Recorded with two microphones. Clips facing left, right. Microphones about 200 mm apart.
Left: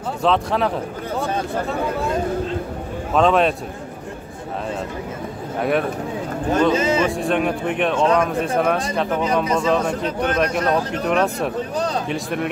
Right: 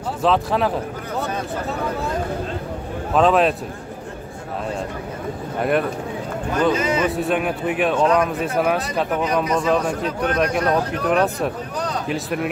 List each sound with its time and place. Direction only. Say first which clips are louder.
0.2 s speech: even; centre (ahead or behind)
3.2 s speech: even; centre (ahead or behind)
5.6 s speech: even; centre (ahead or behind)
6.7 s speech: left 2 dB; 25° left (ahead or behind)
7.1 s speech: left 1 dB; 5° right (ahead or behind)
9.2 s speech: left 1 dB; 25° left (ahead or behind)
9.8 s speech: left 1 dB; centre (ahead or behind)
11.7 s a sound: left 3 dB; 25° left (ahead or behind)
12.1 s speech: even; centre (ahead or behind)